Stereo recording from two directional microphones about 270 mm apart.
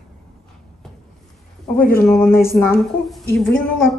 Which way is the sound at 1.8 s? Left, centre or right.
Left.